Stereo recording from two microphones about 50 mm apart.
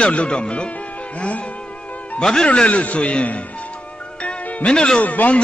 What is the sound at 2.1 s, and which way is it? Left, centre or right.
A man's voice, centre.